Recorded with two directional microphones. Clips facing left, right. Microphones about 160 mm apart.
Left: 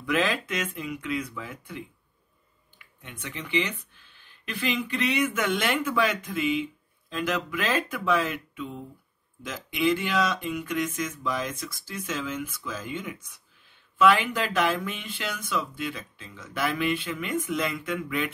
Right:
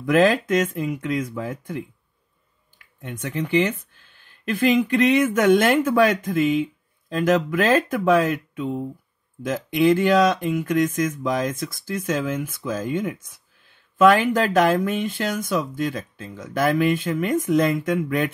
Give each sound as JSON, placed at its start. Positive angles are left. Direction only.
{"t": 0.0, "sound": "speech", "side_deg": -45}
{"t": 3.0, "sound": "speech", "side_deg": -45}